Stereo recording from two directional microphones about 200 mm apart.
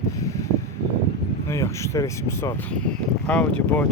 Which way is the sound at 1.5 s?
15° left (ahead or behind).